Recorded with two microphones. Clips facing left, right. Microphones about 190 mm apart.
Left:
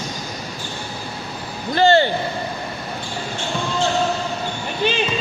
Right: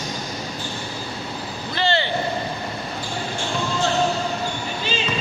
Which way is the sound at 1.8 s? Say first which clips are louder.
Left 8 dB; 45° left (ahead or behind).